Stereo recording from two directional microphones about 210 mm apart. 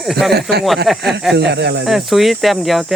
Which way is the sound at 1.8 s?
Centre (ahead or behind).